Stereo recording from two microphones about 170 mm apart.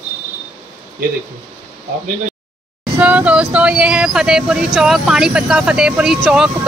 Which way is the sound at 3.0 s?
5° right (ahead or behind).